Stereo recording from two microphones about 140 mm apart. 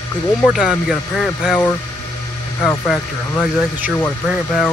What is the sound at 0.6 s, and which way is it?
Speech, centre (ahead or behind).